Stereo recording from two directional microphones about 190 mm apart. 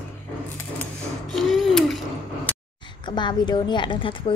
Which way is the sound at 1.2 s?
Centre (ahead or behind).